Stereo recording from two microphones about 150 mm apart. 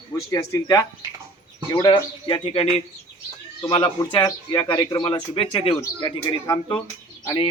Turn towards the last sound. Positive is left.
turn(degrees=30)  # may be behind; listen again after turning